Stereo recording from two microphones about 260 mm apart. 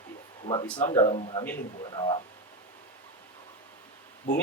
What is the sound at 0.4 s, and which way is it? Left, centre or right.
Speech, centre.